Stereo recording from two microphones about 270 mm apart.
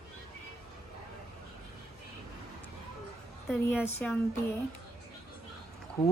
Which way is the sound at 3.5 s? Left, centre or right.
Centre.